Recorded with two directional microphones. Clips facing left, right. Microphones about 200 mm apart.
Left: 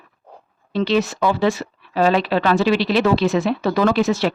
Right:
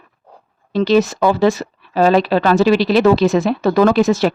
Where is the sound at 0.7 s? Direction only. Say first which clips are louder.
Right 5 dB; 40° right (ahead or behind).